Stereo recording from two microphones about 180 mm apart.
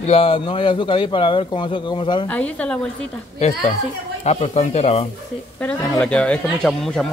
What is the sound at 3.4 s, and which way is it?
Speech, 40° left (ahead or behind).